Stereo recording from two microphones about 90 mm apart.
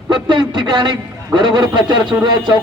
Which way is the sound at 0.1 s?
55° right (ahead or behind).